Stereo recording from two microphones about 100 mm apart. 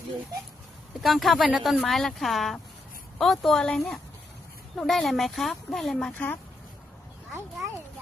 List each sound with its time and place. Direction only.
1.0 s speech: centre (ahead or behind)
6.1 s speech: 15° left (ahead or behind)